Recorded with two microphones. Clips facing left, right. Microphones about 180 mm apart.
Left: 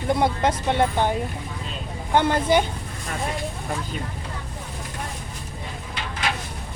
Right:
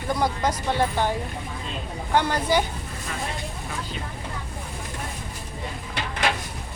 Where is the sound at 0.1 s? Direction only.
25° left (ahead or behind).